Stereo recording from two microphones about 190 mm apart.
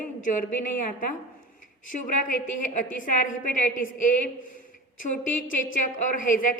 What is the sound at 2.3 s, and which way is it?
A woman's voice, 45° left (ahead or behind).